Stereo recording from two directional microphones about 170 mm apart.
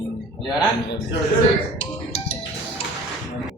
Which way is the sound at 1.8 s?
35° left (ahead or behind).